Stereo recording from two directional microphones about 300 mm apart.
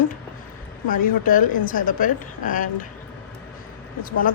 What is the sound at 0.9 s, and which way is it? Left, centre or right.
A woman's voice, left.